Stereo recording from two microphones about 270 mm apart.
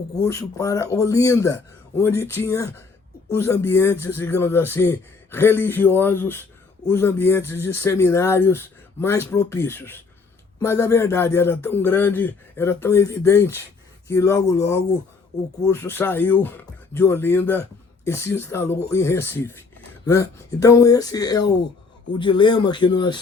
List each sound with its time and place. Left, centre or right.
0.3 s speech: centre